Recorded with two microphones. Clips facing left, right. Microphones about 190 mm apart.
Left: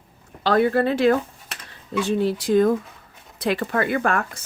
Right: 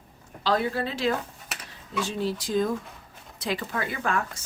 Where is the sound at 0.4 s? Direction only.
60° left (ahead or behind).